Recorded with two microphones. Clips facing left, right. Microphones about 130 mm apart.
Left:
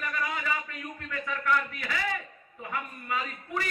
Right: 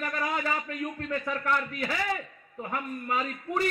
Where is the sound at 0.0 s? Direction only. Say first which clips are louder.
Right 3 dB; 40° right (ahead or behind).